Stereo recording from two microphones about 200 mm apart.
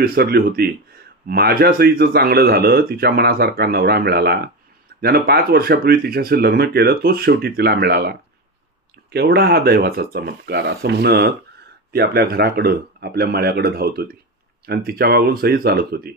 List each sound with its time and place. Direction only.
0.0 s speech: 50° right (ahead or behind)